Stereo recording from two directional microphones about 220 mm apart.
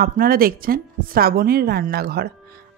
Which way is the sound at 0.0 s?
40° right (ahead or behind).